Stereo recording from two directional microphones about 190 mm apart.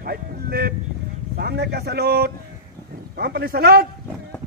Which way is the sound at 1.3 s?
55° right (ahead or behind).